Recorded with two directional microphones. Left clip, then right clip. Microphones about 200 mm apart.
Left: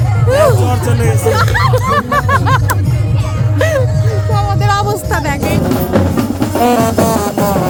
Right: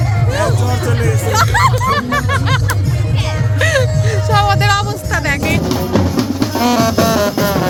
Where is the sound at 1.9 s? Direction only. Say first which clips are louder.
Left 4 dB; 25° left (ahead or behind).